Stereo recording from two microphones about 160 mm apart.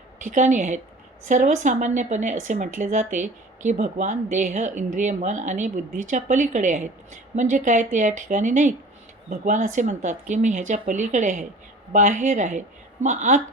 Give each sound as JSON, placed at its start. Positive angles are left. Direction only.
{"t": 0.2, "sound": "speech", "side_deg": -50}